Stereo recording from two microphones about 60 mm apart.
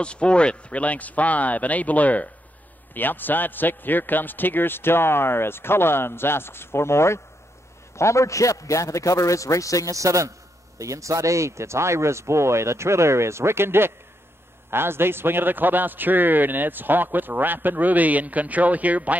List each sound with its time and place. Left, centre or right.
0.0 s a man's voice: centre; by 9.8 s left
9.8 s a man's voice: right